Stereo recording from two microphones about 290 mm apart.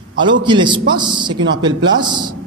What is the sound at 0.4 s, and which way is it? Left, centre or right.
A man's voice, centre.